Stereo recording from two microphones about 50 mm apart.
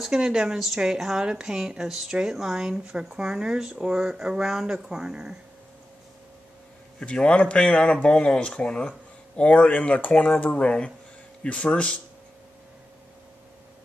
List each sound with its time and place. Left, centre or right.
0.0 s speech: centre
7.0 s speech: centre